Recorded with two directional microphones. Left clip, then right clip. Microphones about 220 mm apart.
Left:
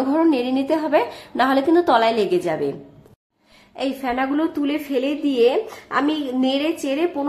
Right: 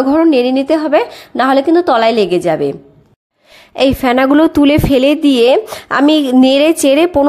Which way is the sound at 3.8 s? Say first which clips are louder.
Right 12 dB; 40° right (ahead or behind).